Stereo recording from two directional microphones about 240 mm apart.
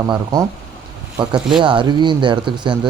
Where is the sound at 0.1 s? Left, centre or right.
Centre.